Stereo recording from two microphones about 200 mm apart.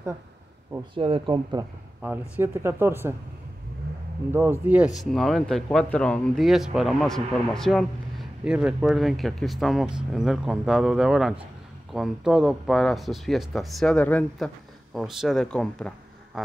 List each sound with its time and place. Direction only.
0.9 s speech: 25° right (ahead or behind)
2.0 s speech: 10° right (ahead or behind)
4.3 s speech: 10° right (ahead or behind); by 15.9 s 5° left (ahead or behind)
16.3 s a sound: centre (ahead or behind)